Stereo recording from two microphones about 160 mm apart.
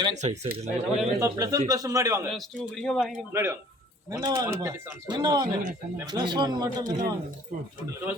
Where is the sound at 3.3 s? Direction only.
15° right (ahead or behind).